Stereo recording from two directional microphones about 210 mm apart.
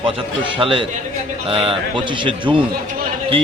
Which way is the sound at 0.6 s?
25° right (ahead or behind).